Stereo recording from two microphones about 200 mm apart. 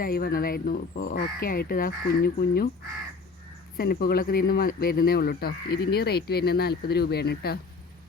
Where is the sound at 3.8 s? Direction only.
50° left (ahead or behind).